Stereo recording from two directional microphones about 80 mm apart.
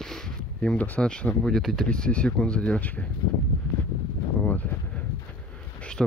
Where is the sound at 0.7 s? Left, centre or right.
Centre.